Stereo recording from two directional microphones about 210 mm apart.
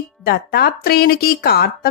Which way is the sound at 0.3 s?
50° left (ahead or behind).